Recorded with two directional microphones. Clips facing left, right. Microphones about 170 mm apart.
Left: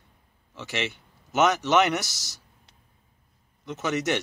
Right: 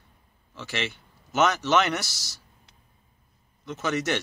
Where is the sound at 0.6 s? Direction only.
20° left (ahead or behind).